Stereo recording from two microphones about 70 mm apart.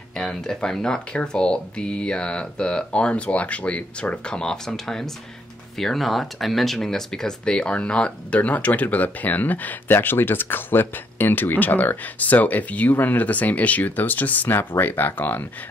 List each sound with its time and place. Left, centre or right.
0.2 s speech: centre; by 15.4 s left